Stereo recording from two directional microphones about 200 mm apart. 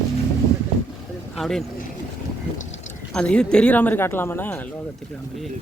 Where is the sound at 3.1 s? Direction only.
5° left (ahead or behind).